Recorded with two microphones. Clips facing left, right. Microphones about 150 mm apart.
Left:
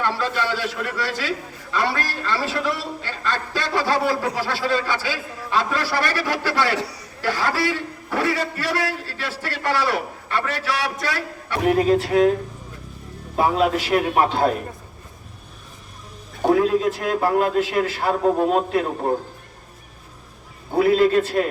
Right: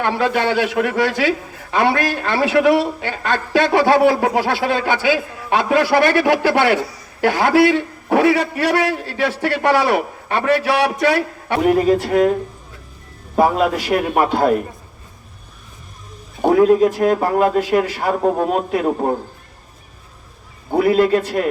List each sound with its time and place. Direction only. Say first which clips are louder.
0.0 s a man's voice: right 6 dB; 60° right (ahead or behind)
6.7 s a man's voice: right 3 dB; 70° left (ahead or behind)
7.2 s a man's voice: right 9 dB; 60° right (ahead or behind)
13.3 s a man's voice: right 4 dB; 50° right (ahead or behind)
16.4 s a man's voice: right 6 dB; 50° right (ahead or behind)
20.7 s a man's voice: right 2 dB; 55° right (ahead or behind)